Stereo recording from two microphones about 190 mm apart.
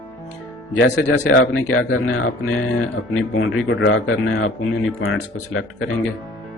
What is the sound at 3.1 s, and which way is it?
Speech, 90° left.